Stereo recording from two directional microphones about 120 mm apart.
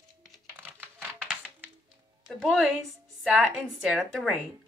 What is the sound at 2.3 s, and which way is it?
A woman's voice, 5° right (ahead or behind).